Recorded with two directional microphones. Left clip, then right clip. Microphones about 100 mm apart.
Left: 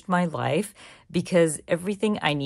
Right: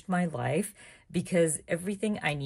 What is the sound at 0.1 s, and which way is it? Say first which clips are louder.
A woman's voice: left 6 dB; 50° left (ahead or behind).